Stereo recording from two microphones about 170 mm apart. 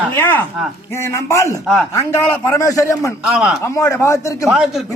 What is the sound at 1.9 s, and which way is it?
A man's voice, 20° left (ahead or behind).